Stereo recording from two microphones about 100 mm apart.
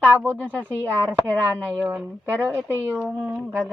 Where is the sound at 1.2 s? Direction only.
20° right (ahead or behind).